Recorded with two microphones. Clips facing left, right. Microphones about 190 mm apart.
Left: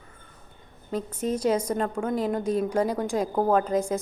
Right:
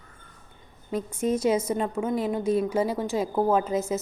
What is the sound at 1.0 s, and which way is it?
A woman's voice, 10° right (ahead or behind).